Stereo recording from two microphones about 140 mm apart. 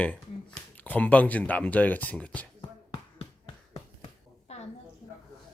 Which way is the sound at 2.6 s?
35° left (ahead or behind).